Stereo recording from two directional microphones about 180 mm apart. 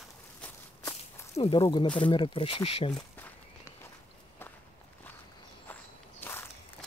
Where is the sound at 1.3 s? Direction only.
30° left (ahead or behind).